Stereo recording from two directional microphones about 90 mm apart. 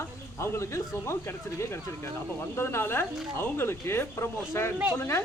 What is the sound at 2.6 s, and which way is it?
Speech, 25° left (ahead or behind).